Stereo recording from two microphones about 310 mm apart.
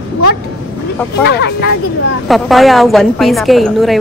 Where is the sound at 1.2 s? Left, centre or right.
Left.